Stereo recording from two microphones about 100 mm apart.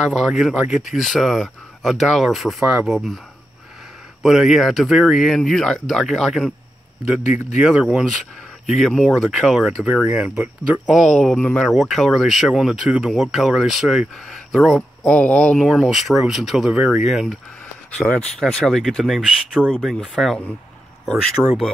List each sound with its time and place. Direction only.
0.0 s speech: 5° right (ahead or behind)
4.2 s speech: 5° right (ahead or behind)
7.6 s speech: 5° right (ahead or behind)
9.8 s speech: 10° right (ahead or behind)
10.9 s speech: 5° right (ahead or behind)
11.6 s speech: centre (ahead or behind)
17.9 s speech: 10° left (ahead or behind)
21.4 s speech: 5° left (ahead or behind)